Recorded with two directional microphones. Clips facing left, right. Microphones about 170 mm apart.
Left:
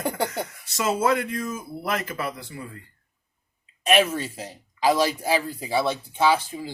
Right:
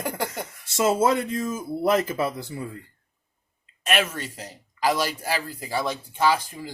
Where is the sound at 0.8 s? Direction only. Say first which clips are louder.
Right 2 dB; 25° right (ahead or behind).